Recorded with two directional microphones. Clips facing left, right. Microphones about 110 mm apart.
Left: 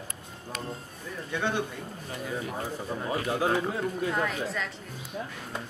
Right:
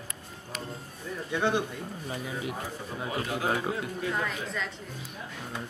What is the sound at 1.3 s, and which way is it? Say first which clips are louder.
Speech: right 2 dB; 15° right (ahead or behind).